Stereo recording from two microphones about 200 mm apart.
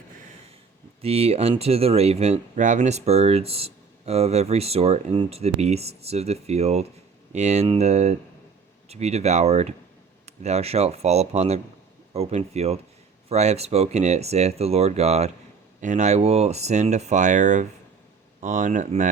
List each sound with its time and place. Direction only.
1.0 s speech: 30° right (ahead or behind)